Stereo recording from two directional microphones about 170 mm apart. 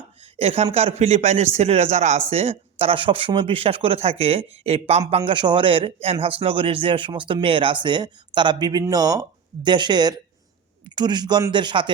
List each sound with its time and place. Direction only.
0.3 s speech: 35° right (ahead or behind)